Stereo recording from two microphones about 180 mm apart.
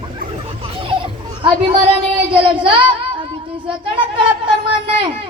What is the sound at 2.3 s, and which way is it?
Speech, 25° right (ahead or behind).